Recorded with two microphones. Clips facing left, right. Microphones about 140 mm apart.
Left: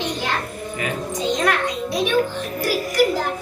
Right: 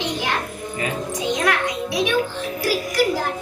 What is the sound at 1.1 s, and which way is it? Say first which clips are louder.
A child's voice: left 1 dB; 10° right (ahead or behind).